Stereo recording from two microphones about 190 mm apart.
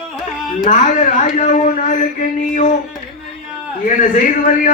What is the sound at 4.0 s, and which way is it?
Speech, 40° left (ahead or behind).